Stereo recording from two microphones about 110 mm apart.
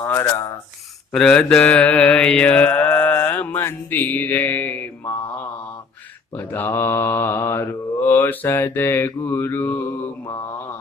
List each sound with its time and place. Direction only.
0.1 s mantra: 20° left (ahead or behind)
1.1 s mantra: 5° left (ahead or behind)
6.3 s mantra: 20° left (ahead or behind)